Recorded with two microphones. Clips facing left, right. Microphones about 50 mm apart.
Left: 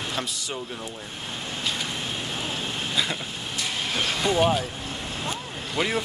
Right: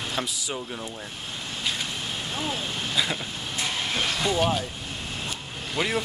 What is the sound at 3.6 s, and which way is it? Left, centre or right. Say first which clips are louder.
Vehicle: even; centre.